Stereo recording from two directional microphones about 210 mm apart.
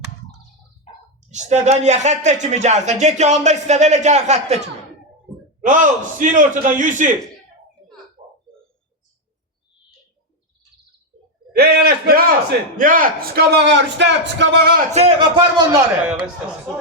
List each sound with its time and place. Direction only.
1.3 s speech: 35° right (ahead or behind)
11.5 s a man's voice: 50° right (ahead or behind)
14.9 s a man's voice: 25° right (ahead or behind)